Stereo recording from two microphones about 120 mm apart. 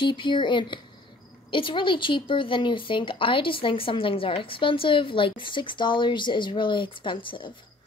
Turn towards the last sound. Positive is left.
turn(degrees=45)  # may be behind; listen again after turning